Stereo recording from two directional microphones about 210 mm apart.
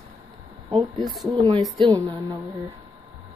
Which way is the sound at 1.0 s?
Centre (ahead or behind).